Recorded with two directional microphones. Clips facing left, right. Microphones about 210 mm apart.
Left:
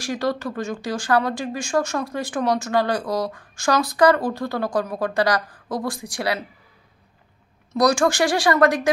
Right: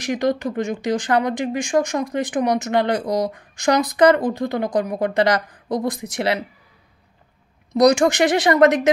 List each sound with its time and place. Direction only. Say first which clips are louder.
0.0 s speech: right 4 dB; 20° right (ahead or behind)
7.7 s speech: right 4 dB; 20° right (ahead or behind)